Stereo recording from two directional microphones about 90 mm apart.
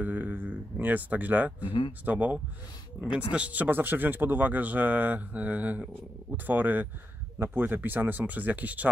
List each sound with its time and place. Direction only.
0.0 s speech: 20° right (ahead or behind)
1.7 s speech: 80° left
2.0 s speech: 20° right (ahead or behind)